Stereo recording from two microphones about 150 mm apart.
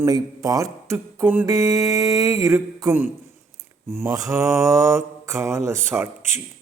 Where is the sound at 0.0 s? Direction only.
25° right (ahead or behind).